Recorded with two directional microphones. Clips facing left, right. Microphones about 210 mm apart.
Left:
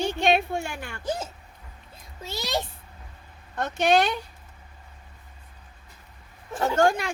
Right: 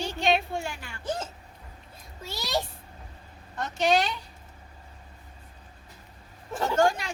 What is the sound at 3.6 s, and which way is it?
Speech, 55° left (ahead or behind).